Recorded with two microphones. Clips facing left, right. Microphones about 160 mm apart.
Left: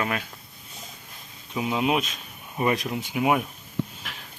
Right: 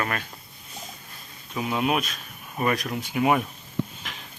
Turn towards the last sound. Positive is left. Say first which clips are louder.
# right 1 dB
turn(degrees=5)  # may be behind; listen again after turning